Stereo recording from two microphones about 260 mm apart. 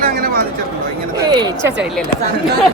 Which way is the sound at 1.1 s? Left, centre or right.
Centre.